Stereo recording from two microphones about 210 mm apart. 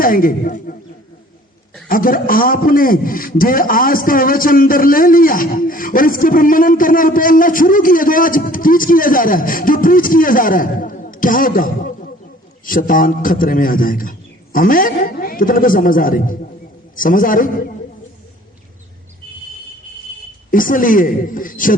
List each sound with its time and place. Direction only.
0.0 s a man's voice: 40° left (ahead or behind)
1.9 s a man's voice: 40° left (ahead or behind)
20.5 s a man's voice: 40° left (ahead or behind)